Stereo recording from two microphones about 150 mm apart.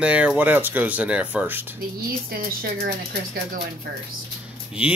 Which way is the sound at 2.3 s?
85° right.